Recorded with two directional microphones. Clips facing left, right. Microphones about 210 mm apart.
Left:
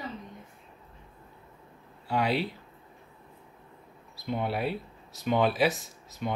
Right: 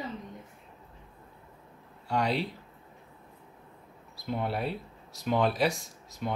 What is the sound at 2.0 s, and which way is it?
Speech, 5° left (ahead or behind).